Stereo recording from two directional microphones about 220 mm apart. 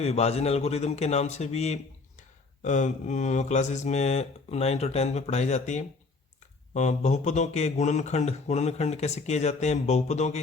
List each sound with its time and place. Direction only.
0.0 s a man's voice: 30° left (ahead or behind)